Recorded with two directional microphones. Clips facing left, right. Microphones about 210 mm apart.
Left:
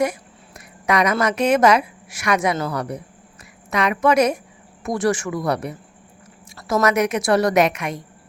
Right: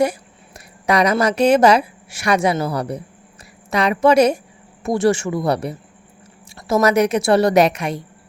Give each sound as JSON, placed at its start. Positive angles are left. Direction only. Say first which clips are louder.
{"t": 0.0, "sound": "a sound", "louder": "right 3 dB", "side_deg": -30}
{"t": 1.2, "sound": "speech", "louder": "right 4 dB", "side_deg": -35}
{"t": 6.8, "sound": "speech", "louder": "right 3 dB", "side_deg": -30}